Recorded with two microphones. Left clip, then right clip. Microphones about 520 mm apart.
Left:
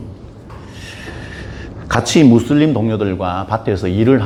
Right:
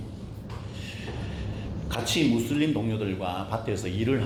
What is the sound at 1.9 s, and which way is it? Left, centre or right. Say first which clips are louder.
Speech: left 14 dB; left.